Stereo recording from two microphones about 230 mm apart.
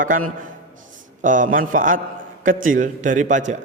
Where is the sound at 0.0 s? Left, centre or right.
Right.